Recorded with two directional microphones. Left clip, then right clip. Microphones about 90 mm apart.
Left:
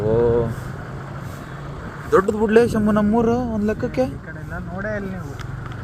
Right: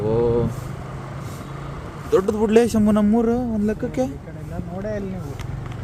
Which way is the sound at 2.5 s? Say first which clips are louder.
Even; 80° right.